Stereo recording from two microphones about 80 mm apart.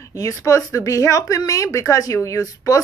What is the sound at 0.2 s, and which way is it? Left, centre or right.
Speech, left.